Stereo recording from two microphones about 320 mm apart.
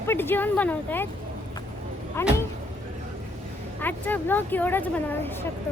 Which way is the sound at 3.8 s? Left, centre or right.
Centre.